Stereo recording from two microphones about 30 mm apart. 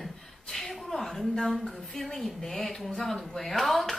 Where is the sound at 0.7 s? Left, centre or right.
Centre.